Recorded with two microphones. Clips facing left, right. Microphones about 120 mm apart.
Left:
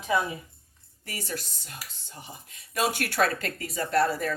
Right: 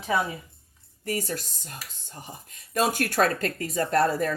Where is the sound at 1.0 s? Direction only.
40° right (ahead or behind).